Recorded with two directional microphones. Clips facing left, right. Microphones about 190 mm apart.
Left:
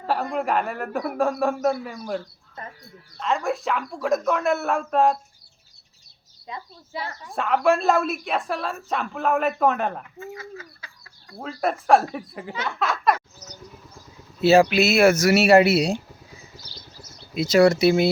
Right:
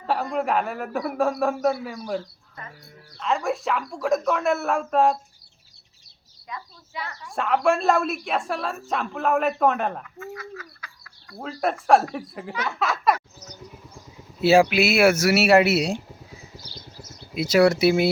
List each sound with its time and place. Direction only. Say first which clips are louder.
0.1 s speech: even; centre (ahead or behind)
6.5 s a woman's voice: left 3 dB; 35° left (ahead or behind)
7.3 s speech: left 1 dB; centre (ahead or behind)
10.3 s chicken: even; 25° left (ahead or behind)
11.3 s speech: even; centre (ahead or behind)
14.4 s speech: left 1 dB; 10° right (ahead or behind)
16.9 s a sound: right 3 dB; 20° right (ahead or behind)
17.3 s speech: left 1 dB; 10° right (ahead or behind)